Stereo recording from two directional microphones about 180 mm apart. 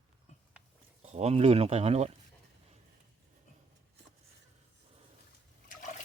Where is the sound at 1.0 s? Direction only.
35° right (ahead or behind).